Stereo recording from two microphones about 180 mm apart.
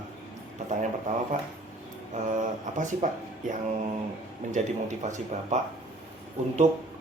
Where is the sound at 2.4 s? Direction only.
45° right (ahead or behind).